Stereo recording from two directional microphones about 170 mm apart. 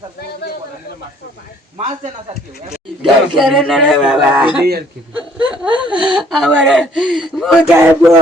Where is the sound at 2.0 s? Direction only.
45° right (ahead or behind).